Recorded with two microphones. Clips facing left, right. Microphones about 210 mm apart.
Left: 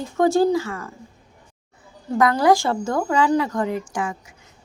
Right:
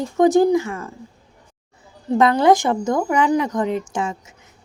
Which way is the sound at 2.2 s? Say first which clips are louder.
Right 2 dB; 25° right (ahead or behind).